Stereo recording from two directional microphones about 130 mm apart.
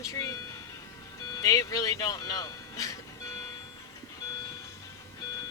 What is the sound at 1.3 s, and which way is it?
Speech, 25° left (ahead or behind).